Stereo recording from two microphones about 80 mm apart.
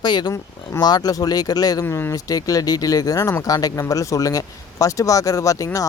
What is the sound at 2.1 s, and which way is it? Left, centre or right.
Speech, left.